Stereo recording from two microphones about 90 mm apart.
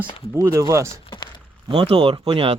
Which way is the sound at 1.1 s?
55° left (ahead or behind).